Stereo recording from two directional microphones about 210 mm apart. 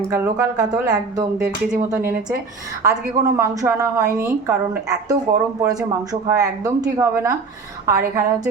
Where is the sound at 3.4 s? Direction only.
10° right (ahead or behind).